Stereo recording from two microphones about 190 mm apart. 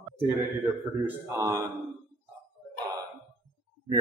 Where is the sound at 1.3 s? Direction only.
15° right (ahead or behind).